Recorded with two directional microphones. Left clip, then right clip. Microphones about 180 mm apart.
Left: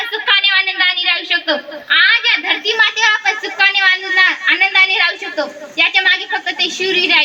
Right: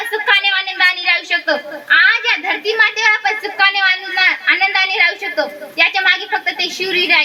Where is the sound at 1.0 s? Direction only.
40° right (ahead or behind).